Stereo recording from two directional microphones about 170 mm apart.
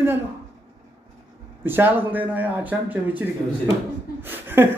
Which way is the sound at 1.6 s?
10° right (ahead or behind).